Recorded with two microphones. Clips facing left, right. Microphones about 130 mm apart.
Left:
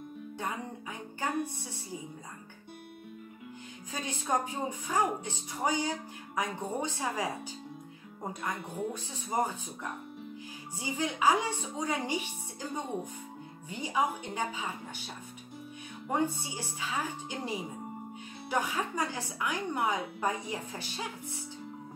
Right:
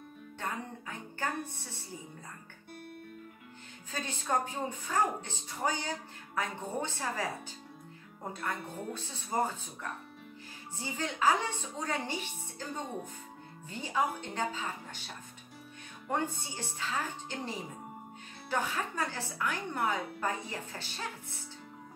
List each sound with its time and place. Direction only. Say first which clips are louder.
0.4 s music: left 1 dB; 15° left (ahead or behind)
3.9 s speech: left 1 dB; 10° left (ahead or behind)
16.1 s speech: left 3 dB; 10° left (ahead or behind)